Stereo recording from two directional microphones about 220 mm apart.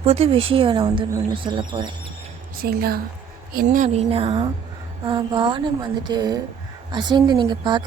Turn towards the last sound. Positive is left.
turn(degrees=-20)  # may be behind; listen again after turning